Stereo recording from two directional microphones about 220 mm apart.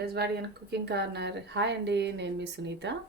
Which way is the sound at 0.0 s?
45° right (ahead or behind).